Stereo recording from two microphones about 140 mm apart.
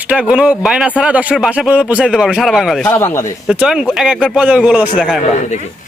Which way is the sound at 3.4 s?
5° right (ahead or behind).